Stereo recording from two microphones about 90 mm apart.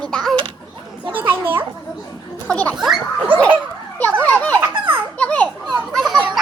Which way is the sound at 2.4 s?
15° left (ahead or behind).